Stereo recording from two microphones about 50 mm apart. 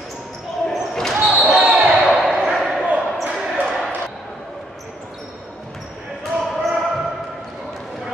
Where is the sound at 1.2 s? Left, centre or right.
Centre.